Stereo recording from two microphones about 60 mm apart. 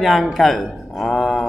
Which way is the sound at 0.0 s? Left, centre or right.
Centre.